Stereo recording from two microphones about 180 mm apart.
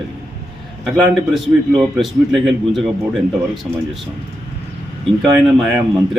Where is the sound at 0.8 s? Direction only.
5° right (ahead or behind).